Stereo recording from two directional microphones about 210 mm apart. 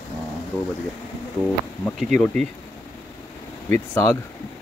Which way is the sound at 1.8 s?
5° left (ahead or behind).